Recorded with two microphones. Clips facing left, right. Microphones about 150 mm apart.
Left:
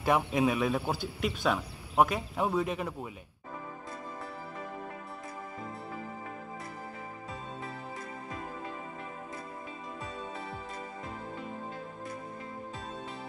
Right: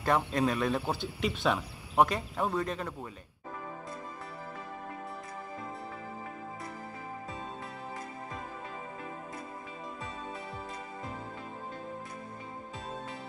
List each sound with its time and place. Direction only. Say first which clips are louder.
0.0 s speech: left 1 dB; 10° left (ahead or behind)